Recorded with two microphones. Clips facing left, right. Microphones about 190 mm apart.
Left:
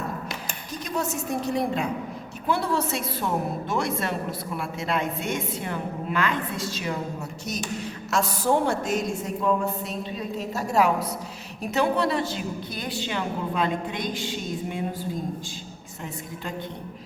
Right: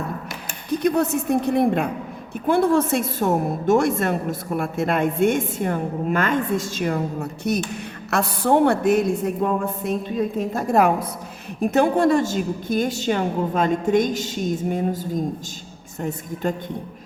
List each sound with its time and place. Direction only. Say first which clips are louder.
0.7 s a woman's voice: right 10 dB; 60° right (ahead or behind)